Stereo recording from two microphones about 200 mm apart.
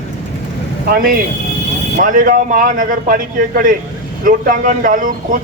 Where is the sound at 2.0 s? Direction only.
45° right (ahead or behind).